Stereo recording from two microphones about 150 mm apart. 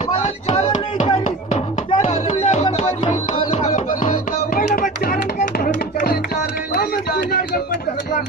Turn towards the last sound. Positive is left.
turn(degrees=90)